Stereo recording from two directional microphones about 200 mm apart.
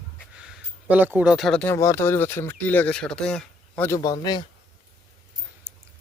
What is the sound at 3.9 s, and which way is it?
Speech, 20° left (ahead or behind).